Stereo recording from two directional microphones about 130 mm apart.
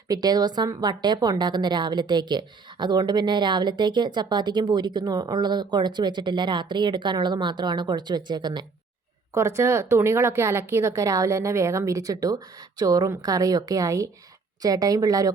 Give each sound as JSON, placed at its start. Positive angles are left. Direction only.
{"t": 0.1, "sound": "a woman's voice", "side_deg": -30}
{"t": 9.3, "sound": "a woman's voice", "side_deg": -20}